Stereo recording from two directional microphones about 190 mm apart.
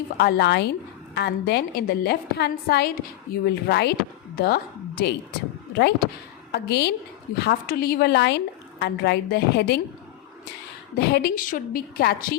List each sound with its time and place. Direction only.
0.2 s a woman's voice: 55° left (ahead or behind)
10.9 s a woman's voice: 55° left (ahead or behind)